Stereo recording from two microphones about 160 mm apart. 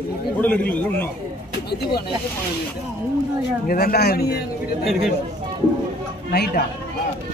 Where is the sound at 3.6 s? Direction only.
70° left (ahead or behind).